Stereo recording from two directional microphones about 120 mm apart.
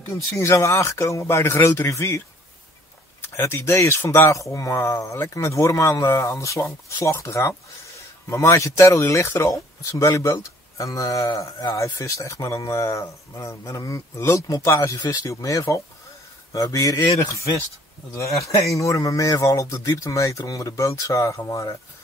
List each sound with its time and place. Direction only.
0.1 s speech: 25° left (ahead or behind)